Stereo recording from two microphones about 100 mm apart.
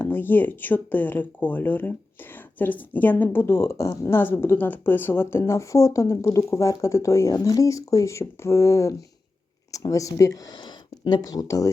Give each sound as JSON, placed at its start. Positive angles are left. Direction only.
{"t": 0.0, "sound": "speech", "side_deg": 20}